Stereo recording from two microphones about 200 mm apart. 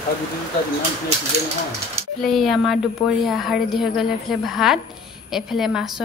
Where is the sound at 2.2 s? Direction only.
Centre (ahead or behind).